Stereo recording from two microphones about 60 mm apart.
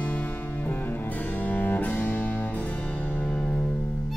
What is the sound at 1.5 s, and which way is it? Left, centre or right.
Music, left.